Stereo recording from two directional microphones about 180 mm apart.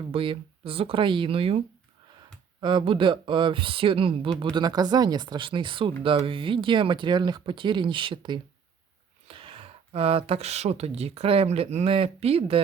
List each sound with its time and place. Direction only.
0.1 s speech: 30° right (ahead or behind)